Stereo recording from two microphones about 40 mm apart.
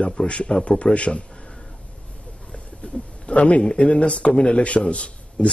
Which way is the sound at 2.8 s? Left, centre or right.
Left.